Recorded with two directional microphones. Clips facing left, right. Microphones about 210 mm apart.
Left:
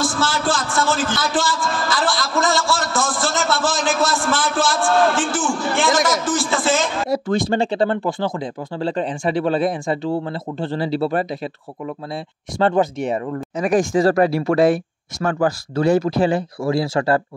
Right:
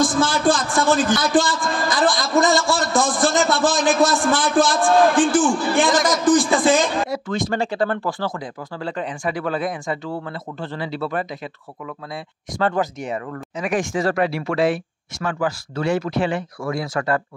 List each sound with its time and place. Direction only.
0.0 s a man's voice: 15° right (ahead or behind)
4.0 s a sound: 15° right (ahead or behind)
7.1 s speech: 35° left (ahead or behind)
12.5 s speech: 25° left (ahead or behind)
13.6 s speech: 40° left (ahead or behind)